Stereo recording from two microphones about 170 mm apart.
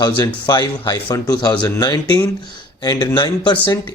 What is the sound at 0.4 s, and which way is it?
Speech, 25° left (ahead or behind).